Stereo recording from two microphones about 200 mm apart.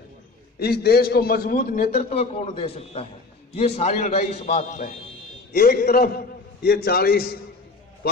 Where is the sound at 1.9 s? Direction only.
30° left (ahead or behind).